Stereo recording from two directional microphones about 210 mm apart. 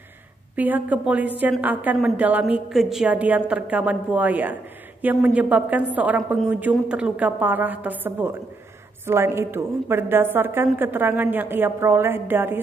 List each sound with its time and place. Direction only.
0.6 s a woman's voice: 5° right (ahead or behind)